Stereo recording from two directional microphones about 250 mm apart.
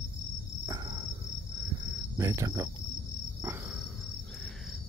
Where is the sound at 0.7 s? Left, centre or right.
Centre.